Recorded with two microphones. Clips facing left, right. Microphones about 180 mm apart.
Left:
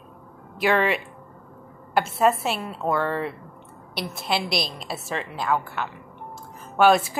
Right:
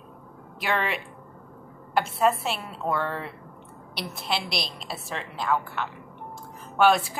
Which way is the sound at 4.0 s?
5° left (ahead or behind).